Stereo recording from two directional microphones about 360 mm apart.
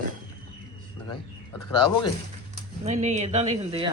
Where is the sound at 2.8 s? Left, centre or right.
Centre.